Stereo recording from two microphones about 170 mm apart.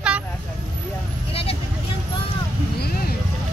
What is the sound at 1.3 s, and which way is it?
Vehicle, 35° left (ahead or behind).